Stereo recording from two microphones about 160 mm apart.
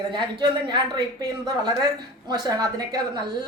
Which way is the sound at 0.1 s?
30° right (ahead or behind).